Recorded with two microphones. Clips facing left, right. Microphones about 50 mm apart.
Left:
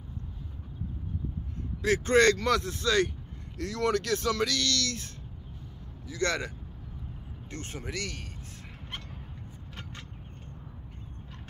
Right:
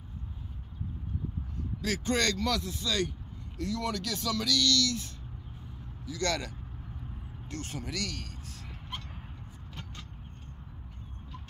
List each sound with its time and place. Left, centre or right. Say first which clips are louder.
1.8 s speech: left 7 dB; left
7.5 s speech: even; left